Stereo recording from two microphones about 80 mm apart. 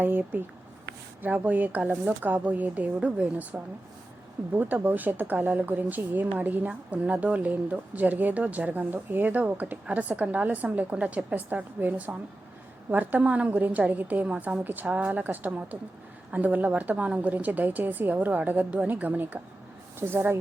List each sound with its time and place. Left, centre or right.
0.0 s speech: right